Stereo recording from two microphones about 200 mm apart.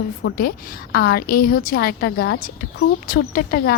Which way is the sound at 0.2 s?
55° left (ahead or behind).